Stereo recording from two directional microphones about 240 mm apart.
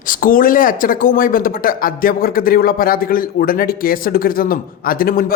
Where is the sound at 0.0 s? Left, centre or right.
Left.